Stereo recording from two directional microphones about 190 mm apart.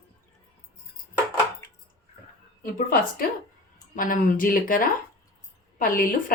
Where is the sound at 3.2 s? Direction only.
50° left (ahead or behind).